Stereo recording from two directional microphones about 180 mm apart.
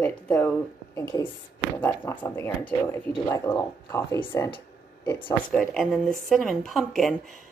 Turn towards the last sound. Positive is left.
turn(degrees=0)  # may be behind; listen again after turning